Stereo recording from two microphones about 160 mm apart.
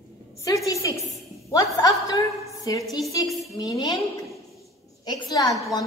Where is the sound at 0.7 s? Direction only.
20° left (ahead or behind).